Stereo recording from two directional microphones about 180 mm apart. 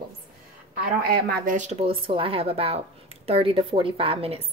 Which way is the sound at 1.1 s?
60° right (ahead or behind).